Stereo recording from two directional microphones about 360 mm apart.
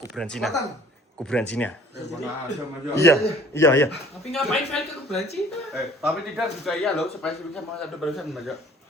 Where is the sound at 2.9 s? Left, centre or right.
Centre.